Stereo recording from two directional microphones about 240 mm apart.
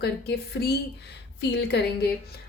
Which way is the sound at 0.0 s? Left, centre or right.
Left.